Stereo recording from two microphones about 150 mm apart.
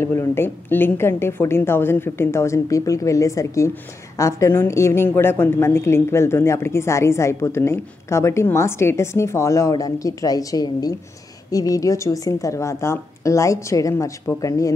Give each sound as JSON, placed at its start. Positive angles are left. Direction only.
{"t": 0.0, "sound": "a woman's voice", "side_deg": 15}